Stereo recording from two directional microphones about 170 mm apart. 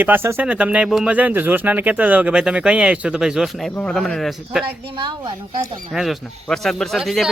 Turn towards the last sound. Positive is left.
turn(degrees=0)  # may be behind; listen again after turning